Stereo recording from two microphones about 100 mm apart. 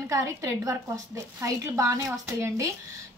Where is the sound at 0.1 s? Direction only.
30° right (ahead or behind).